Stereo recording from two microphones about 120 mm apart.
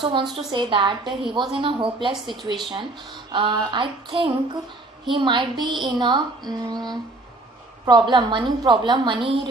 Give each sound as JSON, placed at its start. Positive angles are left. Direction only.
{"t": 0.0, "sound": "speech", "side_deg": -40}